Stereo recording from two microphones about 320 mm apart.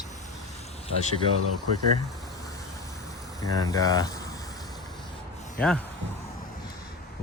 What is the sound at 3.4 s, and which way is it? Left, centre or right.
Speech, centre.